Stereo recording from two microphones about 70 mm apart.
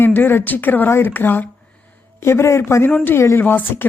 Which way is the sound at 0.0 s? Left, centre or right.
Left.